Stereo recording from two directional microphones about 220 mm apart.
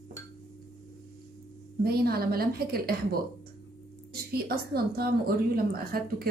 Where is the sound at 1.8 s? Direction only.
45° right (ahead or behind).